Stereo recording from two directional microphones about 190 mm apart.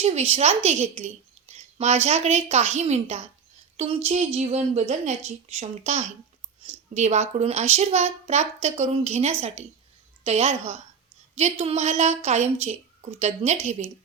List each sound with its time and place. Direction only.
0.0 s a woman's voice: 35° right (ahead or behind)